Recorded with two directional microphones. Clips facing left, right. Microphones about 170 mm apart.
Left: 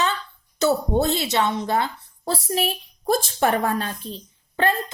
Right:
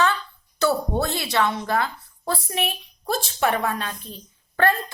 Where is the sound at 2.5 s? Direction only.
40° left (ahead or behind).